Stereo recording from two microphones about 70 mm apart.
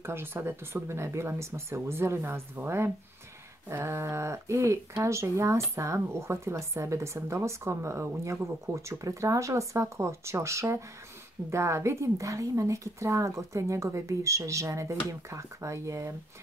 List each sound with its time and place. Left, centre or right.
0.0 s speech: right